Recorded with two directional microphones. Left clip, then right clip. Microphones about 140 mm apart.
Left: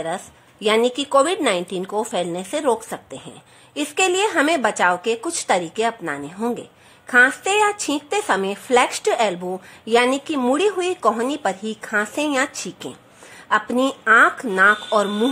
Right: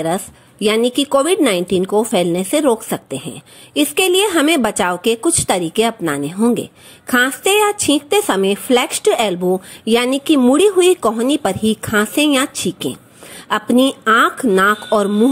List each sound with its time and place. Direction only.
0.0 s a woman's voice: 30° right (ahead or behind)